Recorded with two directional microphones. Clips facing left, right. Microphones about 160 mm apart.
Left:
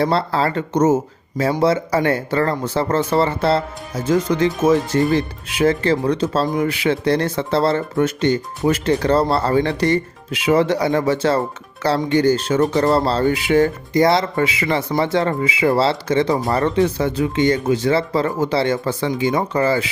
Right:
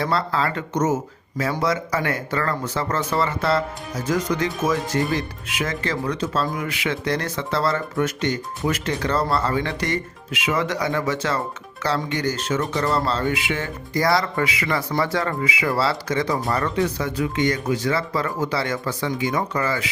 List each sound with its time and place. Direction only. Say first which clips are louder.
0.0 s speech: left 5 dB; 30° left (ahead or behind)
13.9 s speech: left 3 dB; 25° left (ahead or behind)